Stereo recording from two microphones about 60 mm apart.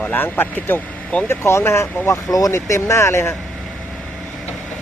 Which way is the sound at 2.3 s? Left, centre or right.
Left.